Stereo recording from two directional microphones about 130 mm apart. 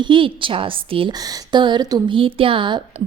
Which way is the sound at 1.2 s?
30° right (ahead or behind).